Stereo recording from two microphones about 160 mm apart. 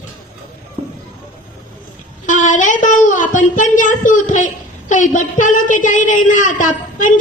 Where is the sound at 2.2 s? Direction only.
50° left (ahead or behind).